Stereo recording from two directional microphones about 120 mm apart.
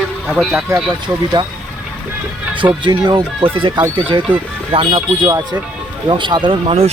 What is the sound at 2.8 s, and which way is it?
Speech, 40° right (ahead or behind).